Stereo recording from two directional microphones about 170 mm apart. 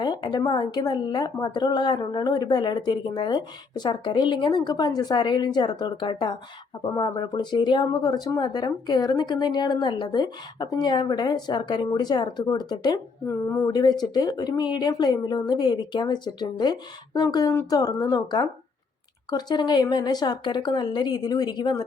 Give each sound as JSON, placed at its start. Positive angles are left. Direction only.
{"t": 0.0, "sound": "speech", "side_deg": 25}